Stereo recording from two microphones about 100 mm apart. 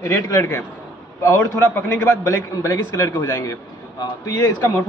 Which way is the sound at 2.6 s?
35° left (ahead or behind).